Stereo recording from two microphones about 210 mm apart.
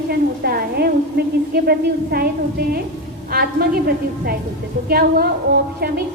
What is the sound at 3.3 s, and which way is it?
A woman's voice, 45° right (ahead or behind).